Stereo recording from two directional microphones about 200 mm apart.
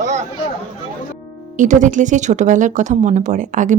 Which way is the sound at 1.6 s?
40° right (ahead or behind).